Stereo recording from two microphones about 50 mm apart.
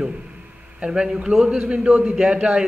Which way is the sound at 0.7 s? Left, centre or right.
Centre.